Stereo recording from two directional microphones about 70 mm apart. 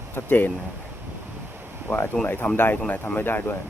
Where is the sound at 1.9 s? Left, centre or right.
Left.